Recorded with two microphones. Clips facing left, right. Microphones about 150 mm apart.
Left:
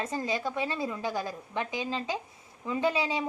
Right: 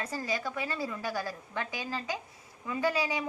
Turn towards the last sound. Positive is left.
turn(degrees=25)  # may be behind; listen again after turning